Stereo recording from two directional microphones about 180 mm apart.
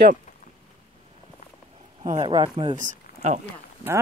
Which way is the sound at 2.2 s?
25° right (ahead or behind).